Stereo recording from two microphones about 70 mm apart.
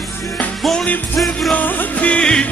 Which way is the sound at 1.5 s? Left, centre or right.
Centre.